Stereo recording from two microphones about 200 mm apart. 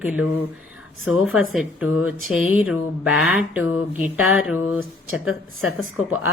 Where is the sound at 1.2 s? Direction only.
Centre (ahead or behind).